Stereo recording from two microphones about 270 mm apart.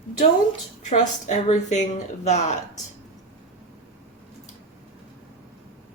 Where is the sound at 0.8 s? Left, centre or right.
Left.